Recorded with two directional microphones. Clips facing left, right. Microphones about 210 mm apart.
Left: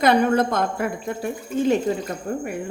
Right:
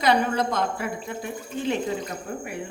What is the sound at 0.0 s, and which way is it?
A woman's voice, 50° left (ahead or behind).